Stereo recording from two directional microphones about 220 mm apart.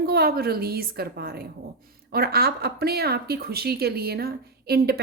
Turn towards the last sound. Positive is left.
turn(degrees=-45)  # may be behind; listen again after turning